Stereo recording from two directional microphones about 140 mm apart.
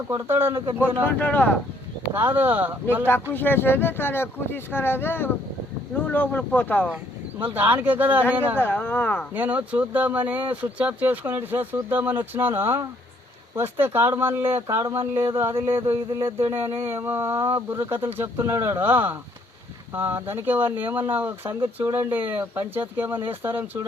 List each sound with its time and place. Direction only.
0.1 s speech: 15° right (ahead or behind)
0.5 s speech: 30° right (ahead or behind)
0.8 s speech: 15° right (ahead or behind)
1.2 s speech: 10° left (ahead or behind)
2.1 s speech: 15° right (ahead or behind)
3.3 s speech: 15° left (ahead or behind)
6.8 s speech: 10° right (ahead or behind)
8.5 s speech: 15° left (ahead or behind)
9.3 s speech: 10° right (ahead or behind)